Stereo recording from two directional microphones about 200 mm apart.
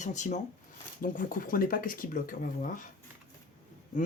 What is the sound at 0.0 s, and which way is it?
Speech, 35° left (ahead or behind).